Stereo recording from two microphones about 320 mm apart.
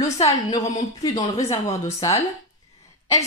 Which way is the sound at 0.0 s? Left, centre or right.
Centre.